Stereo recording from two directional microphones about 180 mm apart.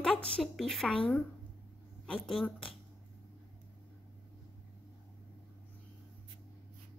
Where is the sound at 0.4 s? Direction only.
Centre (ahead or behind).